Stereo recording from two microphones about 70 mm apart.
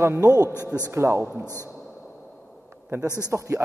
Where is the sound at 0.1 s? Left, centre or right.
Right.